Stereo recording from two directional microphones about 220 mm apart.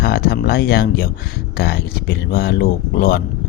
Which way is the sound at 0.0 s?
45° left (ahead or behind).